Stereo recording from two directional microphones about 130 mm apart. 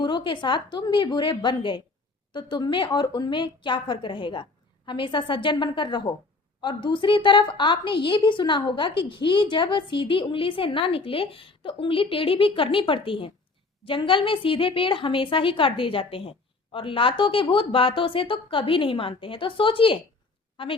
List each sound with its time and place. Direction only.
0.0 s a woman's voice: 35° left (ahead or behind)